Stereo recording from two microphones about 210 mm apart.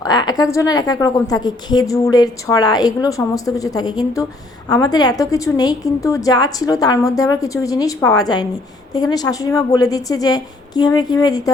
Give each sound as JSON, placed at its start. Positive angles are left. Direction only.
{"t": 0.0, "sound": "a woman's voice", "side_deg": 20}